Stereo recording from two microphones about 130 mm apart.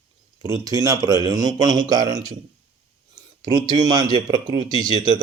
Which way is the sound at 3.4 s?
25° right (ahead or behind).